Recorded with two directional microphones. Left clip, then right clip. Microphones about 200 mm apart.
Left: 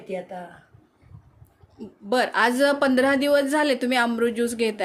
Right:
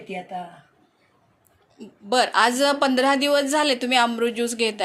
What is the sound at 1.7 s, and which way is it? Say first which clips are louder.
A woman's voice: right 2 dB; 25° left (ahead or behind).